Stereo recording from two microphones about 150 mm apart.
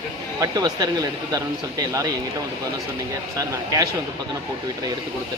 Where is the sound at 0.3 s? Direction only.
25° right (ahead or behind).